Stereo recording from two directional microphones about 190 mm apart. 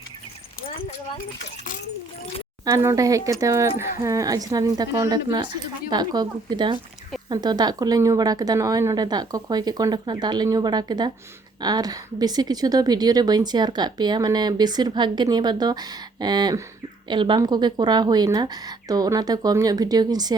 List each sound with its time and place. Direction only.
2.6 s a woman's voice: 15° right (ahead or behind)